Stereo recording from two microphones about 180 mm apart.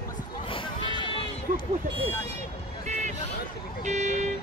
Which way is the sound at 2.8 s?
40° right (ahead or behind).